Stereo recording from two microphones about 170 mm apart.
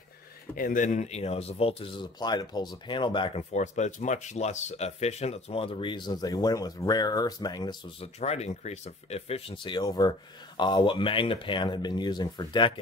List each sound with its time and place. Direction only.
0.6 s speech: 50° left (ahead or behind); by 3.4 s 30° left (ahead or behind)
3.5 s speech: 45° left (ahead or behind); by 7.7 s 25° left (ahead or behind)
8.0 s speech: 40° left (ahead or behind)